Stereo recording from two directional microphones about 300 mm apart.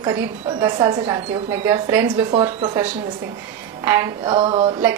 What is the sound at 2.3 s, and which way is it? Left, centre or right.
Speech, centre.